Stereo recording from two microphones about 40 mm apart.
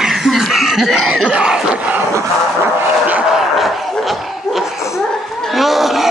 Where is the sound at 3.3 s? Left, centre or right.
Centre.